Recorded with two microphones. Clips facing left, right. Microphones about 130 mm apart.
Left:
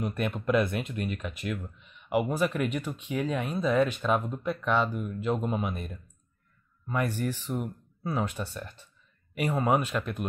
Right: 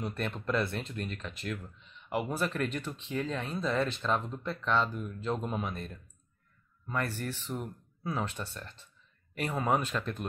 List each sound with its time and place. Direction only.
0.0 s speech: 10° left (ahead or behind)